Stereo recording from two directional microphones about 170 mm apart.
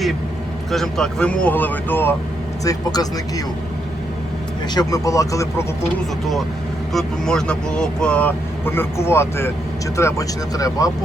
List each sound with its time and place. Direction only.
0.7 s speech: centre (ahead or behind); by 3.4 s 20° left (ahead or behind)
4.7 s speech: 20° left (ahead or behind)
6.9 s speech: 5° left (ahead or behind); by 10.9 s 20° left (ahead or behind)